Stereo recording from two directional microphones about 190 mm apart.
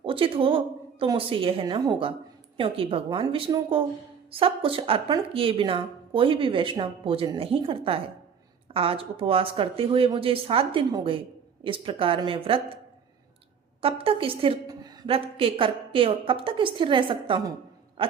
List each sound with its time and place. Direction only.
0.0 s speech: 30° right (ahead or behind)
13.8 s speech: 30° right (ahead or behind)